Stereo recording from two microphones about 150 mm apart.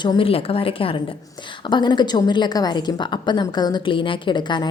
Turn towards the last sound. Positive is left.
turn(degrees=30)  # may be behind; listen again after turning